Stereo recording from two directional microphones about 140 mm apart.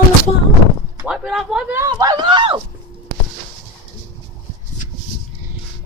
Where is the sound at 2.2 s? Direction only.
35° right (ahead or behind).